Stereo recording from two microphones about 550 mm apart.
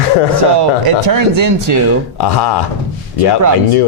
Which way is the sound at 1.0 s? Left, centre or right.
Right.